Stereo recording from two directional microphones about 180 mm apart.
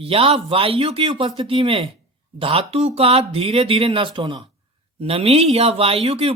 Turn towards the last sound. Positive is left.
turn(degrees=-30)  # may be behind; listen again after turning